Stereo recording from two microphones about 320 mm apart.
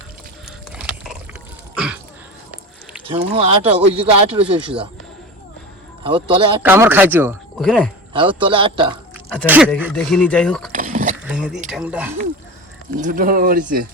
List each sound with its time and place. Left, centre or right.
0.7 s a sound: centre
3.1 s speech: centre
6.0 s speech: centre
6.7 s speech: centre
8.1 s speech: centre
9.3 s speech: centre
10.7 s a sound: right
11.3 s speech: centre
13.0 s speech: right